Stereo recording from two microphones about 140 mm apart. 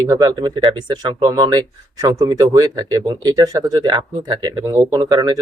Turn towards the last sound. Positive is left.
turn(degrees=-30)  # may be behind; listen again after turning